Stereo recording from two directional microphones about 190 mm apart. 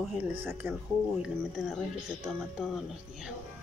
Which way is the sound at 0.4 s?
10° right (ahead or behind).